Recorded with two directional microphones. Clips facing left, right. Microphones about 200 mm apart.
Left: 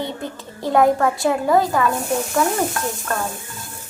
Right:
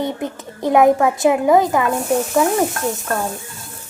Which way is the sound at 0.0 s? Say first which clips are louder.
Right 4 dB; 20° right (ahead or behind).